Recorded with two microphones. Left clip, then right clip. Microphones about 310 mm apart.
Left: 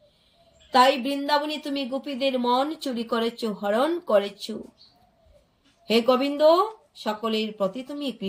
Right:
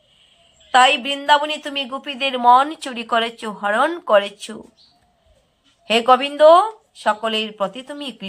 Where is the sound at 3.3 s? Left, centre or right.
Right.